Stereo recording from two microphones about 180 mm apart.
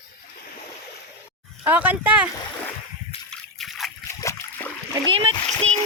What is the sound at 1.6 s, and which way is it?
Speech, 10° right (ahead or behind).